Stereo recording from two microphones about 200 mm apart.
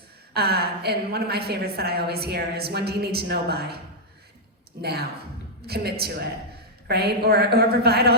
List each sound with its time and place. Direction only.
0.3 s a woman's voice: 50° right (ahead or behind)
4.8 s a woman's voice: 55° right (ahead or behind)